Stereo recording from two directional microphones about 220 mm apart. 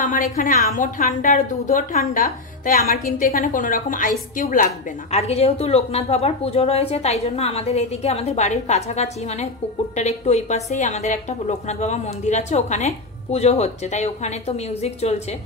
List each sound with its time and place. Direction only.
0.0 s a woman's voice: 35° left (ahead or behind)